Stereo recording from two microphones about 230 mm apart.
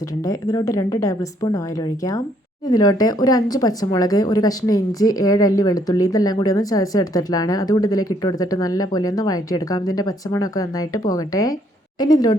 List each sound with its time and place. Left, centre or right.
0.3 s speech: centre
2.6 s speech: centre